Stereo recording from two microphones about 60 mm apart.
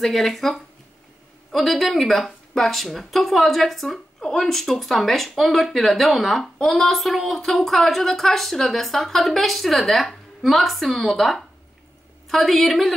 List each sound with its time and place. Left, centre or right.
0.0 s a woman's voice: centre